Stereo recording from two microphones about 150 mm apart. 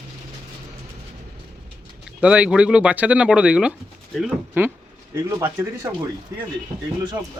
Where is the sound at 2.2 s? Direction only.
10° right (ahead or behind).